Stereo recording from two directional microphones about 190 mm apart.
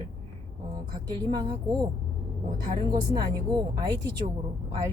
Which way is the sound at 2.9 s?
20° right (ahead or behind).